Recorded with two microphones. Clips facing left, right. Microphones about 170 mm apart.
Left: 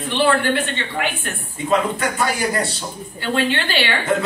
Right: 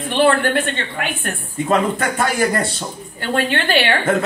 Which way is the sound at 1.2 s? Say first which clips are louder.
Right 4 dB; 50° right (ahead or behind).